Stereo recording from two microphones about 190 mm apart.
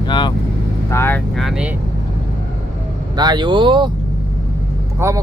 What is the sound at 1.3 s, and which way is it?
Speech, centre (ahead or behind).